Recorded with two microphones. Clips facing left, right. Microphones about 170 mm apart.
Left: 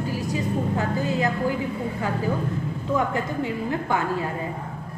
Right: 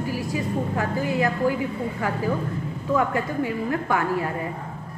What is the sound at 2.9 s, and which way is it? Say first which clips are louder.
A woman's voice: right 2 dB; 25° left (ahead or behind).